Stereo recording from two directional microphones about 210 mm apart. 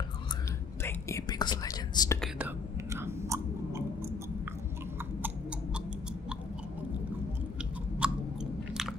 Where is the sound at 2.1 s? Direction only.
5° right (ahead or behind).